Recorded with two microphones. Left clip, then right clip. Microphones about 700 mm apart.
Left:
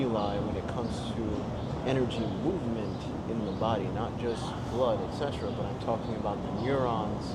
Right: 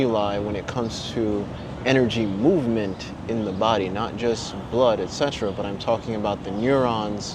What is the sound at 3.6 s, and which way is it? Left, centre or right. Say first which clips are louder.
Speech: right 10 dB; right.